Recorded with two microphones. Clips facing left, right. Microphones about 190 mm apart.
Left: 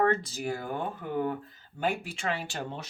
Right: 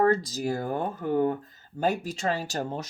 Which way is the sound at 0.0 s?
35° right (ahead or behind).